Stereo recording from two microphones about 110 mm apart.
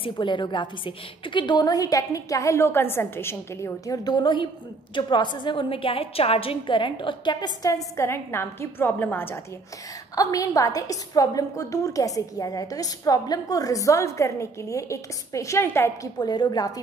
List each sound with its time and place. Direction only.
0.0 s a woman's voice: 45° left (ahead or behind)
7.9 s a woman's voice: 25° left (ahead or behind)
10.1 s a woman's voice: 35° left (ahead or behind)
16.2 s a woman's voice: 40° left (ahead or behind)